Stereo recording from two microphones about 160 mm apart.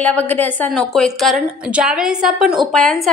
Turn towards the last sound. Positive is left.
turn(degrees=0)  # may be behind; listen again after turning